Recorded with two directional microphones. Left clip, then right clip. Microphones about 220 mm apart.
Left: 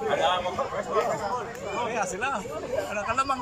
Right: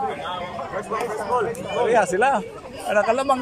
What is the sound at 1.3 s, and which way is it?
A man's voice, 45° right (ahead or behind).